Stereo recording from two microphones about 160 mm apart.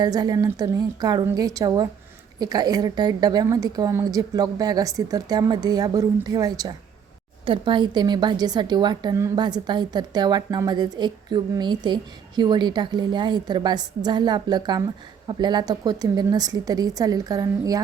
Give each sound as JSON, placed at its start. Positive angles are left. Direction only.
{"t": 0.0, "sound": "a woman's voice", "side_deg": -25}